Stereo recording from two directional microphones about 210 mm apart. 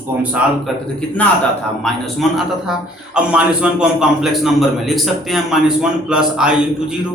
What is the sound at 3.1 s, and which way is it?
A man's voice, 5° right (ahead or behind).